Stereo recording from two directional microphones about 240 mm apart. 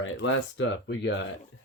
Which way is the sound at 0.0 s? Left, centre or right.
Left.